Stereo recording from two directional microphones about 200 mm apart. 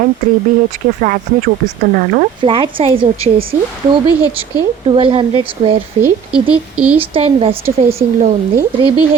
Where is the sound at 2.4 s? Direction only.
25° right (ahead or behind).